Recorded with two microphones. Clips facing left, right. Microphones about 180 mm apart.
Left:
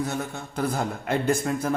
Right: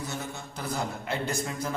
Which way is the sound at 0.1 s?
55° left (ahead or behind).